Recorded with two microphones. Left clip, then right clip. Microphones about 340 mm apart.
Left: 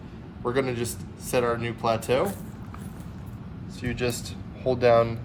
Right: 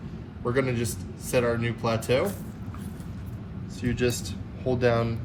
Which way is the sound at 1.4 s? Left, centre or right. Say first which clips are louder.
Even; centre.